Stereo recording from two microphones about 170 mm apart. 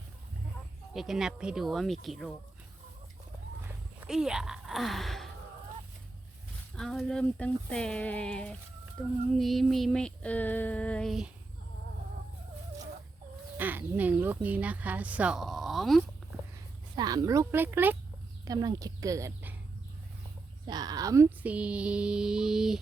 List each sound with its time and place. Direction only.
0.9 s female singing: centre (ahead or behind)
4.0 s speech: 5° right (ahead or behind)
6.7 s female singing: 5° left (ahead or behind)
13.6 s speech: 10° right (ahead or behind)
16.9 s speech: 25° right (ahead or behind)
18.4 s speech: 20° right (ahead or behind)
20.7 s speech: 25° right (ahead or behind); by 22.8 s 5° right (ahead or behind)